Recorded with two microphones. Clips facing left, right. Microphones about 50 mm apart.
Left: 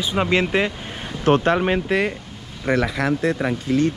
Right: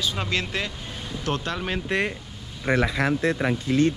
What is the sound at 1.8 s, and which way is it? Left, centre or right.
Speech, centre.